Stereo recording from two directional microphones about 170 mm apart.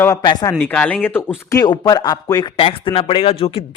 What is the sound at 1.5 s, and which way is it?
Speech, 25° left (ahead or behind).